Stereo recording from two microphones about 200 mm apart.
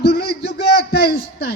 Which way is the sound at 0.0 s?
50° left (ahead or behind).